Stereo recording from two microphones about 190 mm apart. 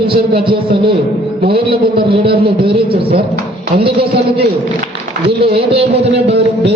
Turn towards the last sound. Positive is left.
turn(degrees=-65)  # may be behind; listen again after turning